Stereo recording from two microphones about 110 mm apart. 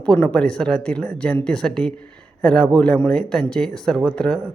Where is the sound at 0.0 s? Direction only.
10° left (ahead or behind).